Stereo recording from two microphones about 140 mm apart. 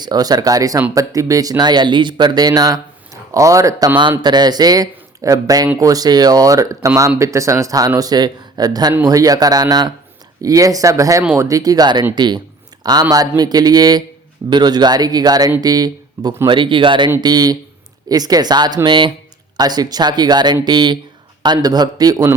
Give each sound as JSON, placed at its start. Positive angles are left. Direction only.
{"t": 0.0, "sound": "speech", "side_deg": -30}